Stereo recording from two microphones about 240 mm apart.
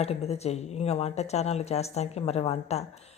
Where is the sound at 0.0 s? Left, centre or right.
Left.